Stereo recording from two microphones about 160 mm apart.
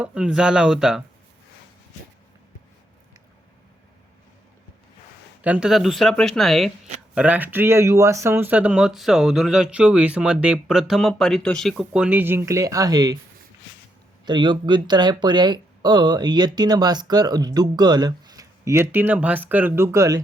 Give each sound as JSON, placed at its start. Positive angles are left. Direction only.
{"t": 0.0, "sound": "speech", "side_deg": -5}
{"t": 5.4, "sound": "speech", "side_deg": -10}
{"t": 14.3, "sound": "speech", "side_deg": -30}